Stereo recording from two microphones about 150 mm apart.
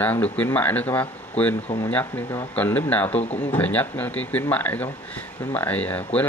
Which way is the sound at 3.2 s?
45° left (ahead or behind).